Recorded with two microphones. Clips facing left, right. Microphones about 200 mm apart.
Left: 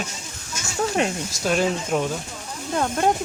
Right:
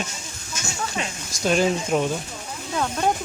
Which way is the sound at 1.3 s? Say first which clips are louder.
Right 1 dB; centre (ahead or behind).